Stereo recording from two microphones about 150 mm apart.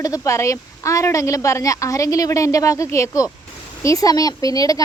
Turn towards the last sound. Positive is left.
turn(degrees=25)  # may be behind; listen again after turning